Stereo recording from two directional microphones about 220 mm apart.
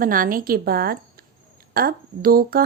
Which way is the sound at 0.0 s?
40° right (ahead or behind).